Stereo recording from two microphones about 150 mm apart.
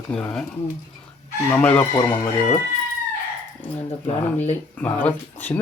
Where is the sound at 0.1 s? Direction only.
5° left (ahead or behind).